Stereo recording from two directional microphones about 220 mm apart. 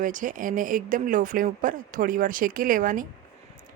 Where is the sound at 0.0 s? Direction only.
35° right (ahead or behind).